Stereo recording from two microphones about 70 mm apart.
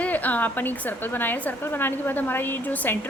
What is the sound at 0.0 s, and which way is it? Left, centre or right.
A woman's voice, left.